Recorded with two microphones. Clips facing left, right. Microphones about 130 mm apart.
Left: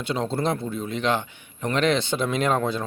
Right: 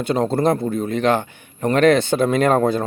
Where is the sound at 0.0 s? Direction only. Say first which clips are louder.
Right 7 dB; 50° right (ahead or behind).